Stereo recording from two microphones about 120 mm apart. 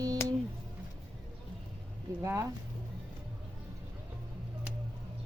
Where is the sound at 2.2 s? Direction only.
20° right (ahead or behind).